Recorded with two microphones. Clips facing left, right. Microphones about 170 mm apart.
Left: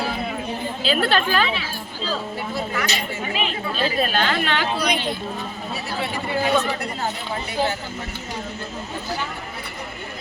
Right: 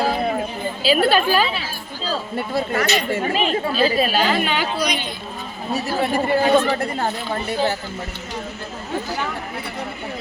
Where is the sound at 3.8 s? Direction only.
5° right (ahead or behind).